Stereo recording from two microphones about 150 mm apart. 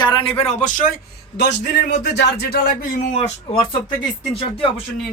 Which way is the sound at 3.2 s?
35° left (ahead or behind).